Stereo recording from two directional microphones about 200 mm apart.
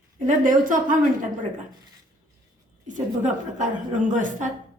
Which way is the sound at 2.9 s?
40° right (ahead or behind).